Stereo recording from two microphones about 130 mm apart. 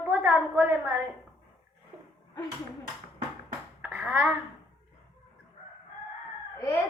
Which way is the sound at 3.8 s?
5° right (ahead or behind).